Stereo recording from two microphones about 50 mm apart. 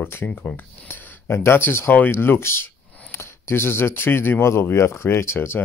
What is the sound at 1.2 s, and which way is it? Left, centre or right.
Speech, left.